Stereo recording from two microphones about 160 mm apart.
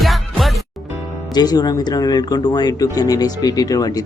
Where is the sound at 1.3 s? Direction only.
25° left (ahead or behind).